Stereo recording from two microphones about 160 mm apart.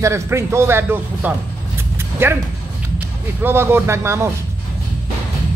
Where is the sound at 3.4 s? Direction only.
15° right (ahead or behind).